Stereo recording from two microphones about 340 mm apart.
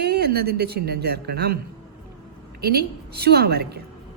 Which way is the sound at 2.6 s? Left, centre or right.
Right.